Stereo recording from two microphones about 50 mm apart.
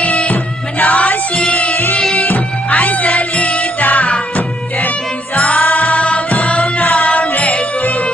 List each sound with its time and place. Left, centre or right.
0.0 s music: left